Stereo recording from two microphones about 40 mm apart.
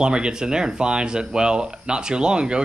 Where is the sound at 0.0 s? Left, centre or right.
Right.